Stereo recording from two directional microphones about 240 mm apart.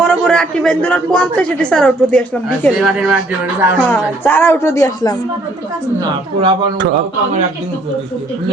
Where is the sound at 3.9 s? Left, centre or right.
Centre.